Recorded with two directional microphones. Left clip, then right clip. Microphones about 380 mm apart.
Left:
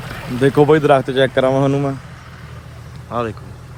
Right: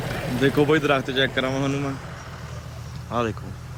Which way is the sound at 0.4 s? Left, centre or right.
Centre.